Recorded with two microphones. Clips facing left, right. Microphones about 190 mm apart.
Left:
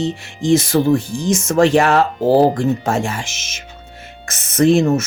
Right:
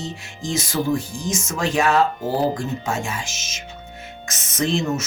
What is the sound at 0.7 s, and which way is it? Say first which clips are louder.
Speech: left 8 dB; 55° left (ahead or behind).